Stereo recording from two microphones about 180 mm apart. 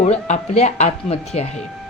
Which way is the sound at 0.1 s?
35° left (ahead or behind).